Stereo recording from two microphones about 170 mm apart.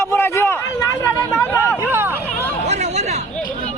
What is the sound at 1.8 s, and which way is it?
Hubbub, 15° right (ahead or behind).